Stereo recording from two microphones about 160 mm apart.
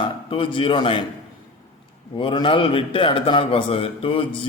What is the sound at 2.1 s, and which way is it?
A man's voice, 30° left (ahead or behind).